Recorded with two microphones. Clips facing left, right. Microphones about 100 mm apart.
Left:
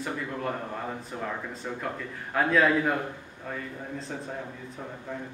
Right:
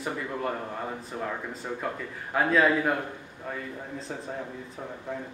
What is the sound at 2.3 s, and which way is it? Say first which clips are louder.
Speech: even; 5° right (ahead or behind).